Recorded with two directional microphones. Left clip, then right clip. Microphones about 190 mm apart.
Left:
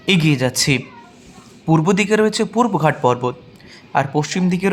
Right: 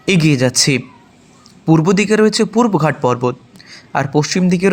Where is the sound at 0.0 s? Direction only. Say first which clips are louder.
Right 3 dB; 15° right (ahead or behind).